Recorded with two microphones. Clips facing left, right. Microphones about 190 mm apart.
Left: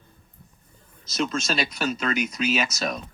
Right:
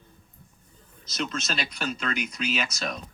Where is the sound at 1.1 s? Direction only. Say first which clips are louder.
Left 5 dB; 45° left (ahead or behind).